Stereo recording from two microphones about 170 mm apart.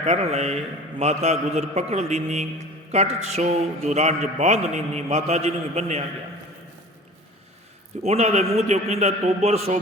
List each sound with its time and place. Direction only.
0.0 s a man's voice: 40° right (ahead or behind)
8.0 s a man's voice: 40° right (ahead or behind)